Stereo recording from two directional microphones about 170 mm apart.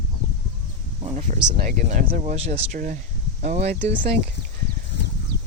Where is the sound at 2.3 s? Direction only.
35° right (ahead or behind).